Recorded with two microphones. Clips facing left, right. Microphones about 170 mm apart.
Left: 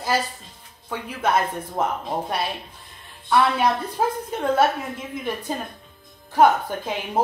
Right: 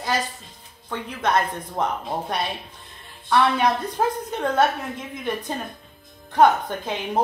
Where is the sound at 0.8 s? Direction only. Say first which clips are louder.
Left 1 dB; 10° left (ahead or behind).